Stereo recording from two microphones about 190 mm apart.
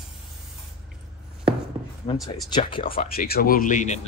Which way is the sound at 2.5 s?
25° left (ahead or behind).